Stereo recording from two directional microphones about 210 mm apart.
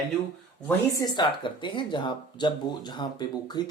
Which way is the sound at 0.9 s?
20° left (ahead or behind).